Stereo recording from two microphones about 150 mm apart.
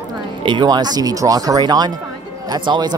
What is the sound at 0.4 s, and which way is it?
Speech, 30° right (ahead or behind).